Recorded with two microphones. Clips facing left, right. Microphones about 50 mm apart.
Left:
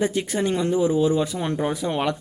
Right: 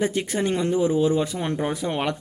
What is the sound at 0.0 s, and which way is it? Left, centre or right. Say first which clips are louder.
Speech: left 1 dB; right.